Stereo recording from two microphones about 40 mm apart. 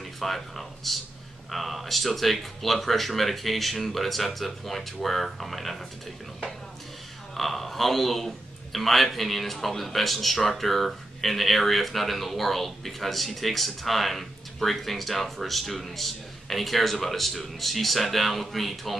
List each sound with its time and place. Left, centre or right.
0.0 s a man's voice: centre
7.3 s a man's voice: centre